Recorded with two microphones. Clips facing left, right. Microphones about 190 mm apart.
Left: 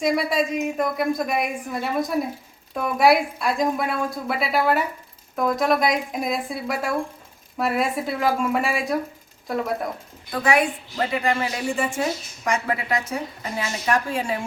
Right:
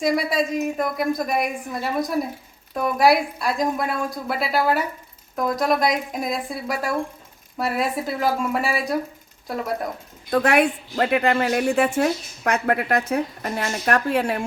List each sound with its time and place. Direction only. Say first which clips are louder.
0.0 s a woman's voice: even; centre (ahead or behind)
10.3 s speech: right 3 dB; 60° right (ahead or behind)